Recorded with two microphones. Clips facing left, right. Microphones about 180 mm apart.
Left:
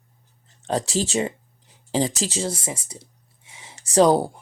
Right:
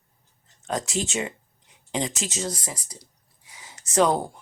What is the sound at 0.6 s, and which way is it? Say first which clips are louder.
Speech: left 4 dB; 35° left (ahead or behind).